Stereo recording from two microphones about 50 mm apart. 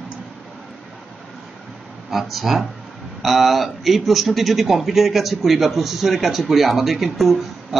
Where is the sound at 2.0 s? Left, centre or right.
Centre.